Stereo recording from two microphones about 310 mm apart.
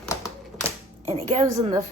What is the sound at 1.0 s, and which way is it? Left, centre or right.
Speech, right.